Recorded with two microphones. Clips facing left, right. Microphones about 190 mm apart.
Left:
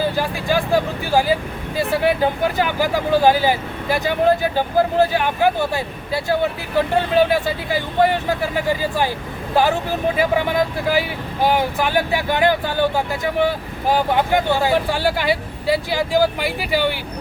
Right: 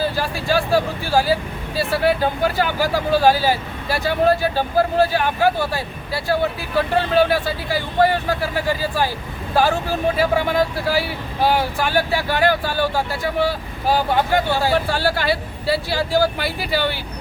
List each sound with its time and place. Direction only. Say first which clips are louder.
0.2 s speech: left 1 dB; 15° left (ahead or behind)
10.2 s speech: left 1 dB; 15° left (ahead or behind)